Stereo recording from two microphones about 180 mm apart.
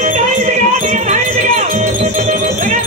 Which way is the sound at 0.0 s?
40° right (ahead or behind).